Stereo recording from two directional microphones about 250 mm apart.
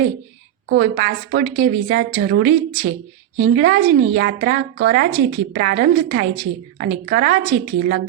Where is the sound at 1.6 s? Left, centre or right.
Right.